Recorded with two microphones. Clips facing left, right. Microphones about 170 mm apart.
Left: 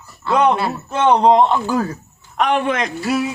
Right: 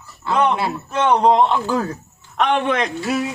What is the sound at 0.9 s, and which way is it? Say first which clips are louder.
Speech: left 2 dB; 20° left (ahead or behind).